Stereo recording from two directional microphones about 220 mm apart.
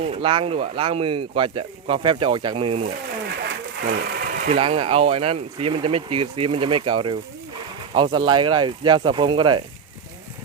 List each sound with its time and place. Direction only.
0.0 s speech: 25° right (ahead or behind)
3.8 s sewing machine: 45° right (ahead or behind)
4.5 s speech: 25° right (ahead or behind)